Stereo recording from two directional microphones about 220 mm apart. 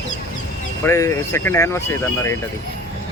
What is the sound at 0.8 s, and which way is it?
Speech, 10° left (ahead or behind).